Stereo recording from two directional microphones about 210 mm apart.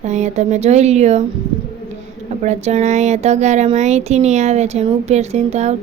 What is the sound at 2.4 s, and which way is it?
A woman's voice, 30° right (ahead or behind).